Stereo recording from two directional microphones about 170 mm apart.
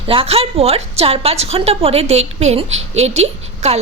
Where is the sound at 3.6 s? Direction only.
40° right (ahead or behind).